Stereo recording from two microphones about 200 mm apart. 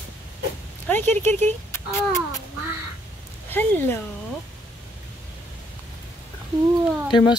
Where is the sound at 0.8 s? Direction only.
10° left (ahead or behind).